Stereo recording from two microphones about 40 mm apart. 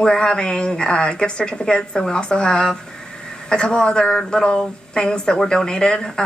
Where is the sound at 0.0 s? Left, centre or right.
Centre.